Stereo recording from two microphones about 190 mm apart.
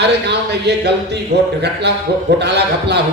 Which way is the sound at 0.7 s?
65° right (ahead or behind).